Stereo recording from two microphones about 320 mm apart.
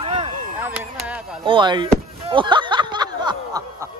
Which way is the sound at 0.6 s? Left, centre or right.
Centre.